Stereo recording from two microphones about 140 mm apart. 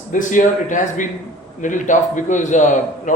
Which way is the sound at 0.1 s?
65° left (ahead or behind).